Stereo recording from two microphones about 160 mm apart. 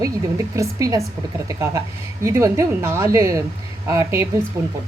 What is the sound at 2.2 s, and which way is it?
A woman's voice, 20° right (ahead or behind).